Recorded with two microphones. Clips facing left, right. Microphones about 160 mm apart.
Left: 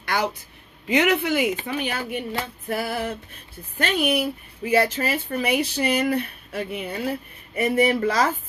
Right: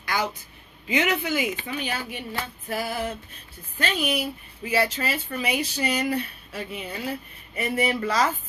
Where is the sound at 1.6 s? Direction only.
45° left (ahead or behind).